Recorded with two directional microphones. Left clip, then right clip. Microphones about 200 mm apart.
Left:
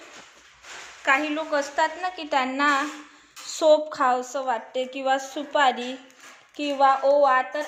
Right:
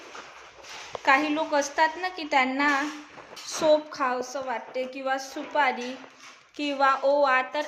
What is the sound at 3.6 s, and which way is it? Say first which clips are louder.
A woman's voice: left 4 dB; 10° left (ahead or behind).